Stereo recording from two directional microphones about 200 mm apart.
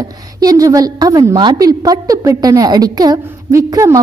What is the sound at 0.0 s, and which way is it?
A woman's voice, 20° right (ahead or behind).